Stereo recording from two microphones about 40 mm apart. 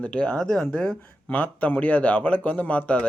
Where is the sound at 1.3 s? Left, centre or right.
Left.